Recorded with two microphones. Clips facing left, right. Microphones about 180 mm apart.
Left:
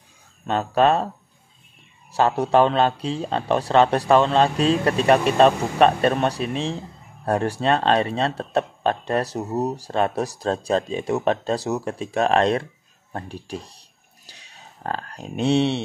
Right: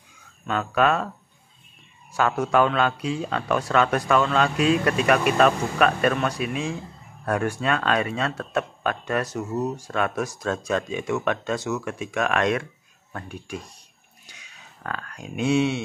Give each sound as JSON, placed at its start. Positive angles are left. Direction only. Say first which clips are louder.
{"t": 0.5, "sound": "speech", "louder": "left 3 dB", "side_deg": 30}
{"t": 2.1, "sound": "speech", "louder": "left 3 dB", "side_deg": 30}